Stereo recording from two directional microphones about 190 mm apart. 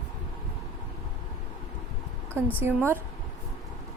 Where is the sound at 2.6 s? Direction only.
10° right (ahead or behind).